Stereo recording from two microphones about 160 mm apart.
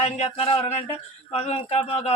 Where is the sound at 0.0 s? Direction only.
40° left (ahead or behind).